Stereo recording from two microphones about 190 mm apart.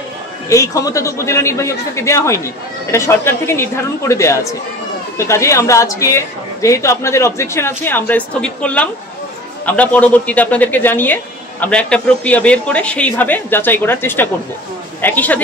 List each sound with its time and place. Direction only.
0.5 s a man's voice: 15° left (ahead or behind)